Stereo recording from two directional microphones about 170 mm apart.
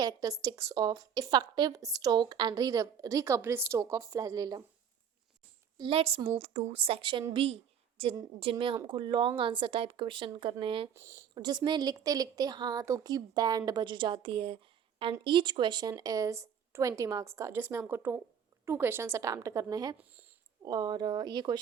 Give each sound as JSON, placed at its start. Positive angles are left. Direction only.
{"t": 0.0, "sound": "a woman's voice", "side_deg": -20}
{"t": 5.7, "sound": "a woman's voice", "side_deg": -30}
{"t": 10.9, "sound": "a woman's voice", "side_deg": -15}